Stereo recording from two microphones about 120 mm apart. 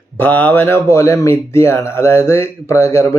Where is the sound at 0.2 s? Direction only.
15° left (ahead or behind).